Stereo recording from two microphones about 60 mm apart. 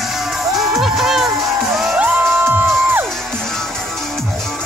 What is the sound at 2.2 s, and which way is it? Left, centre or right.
Music, right.